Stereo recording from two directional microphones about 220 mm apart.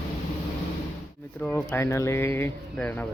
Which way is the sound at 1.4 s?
5° left (ahead or behind).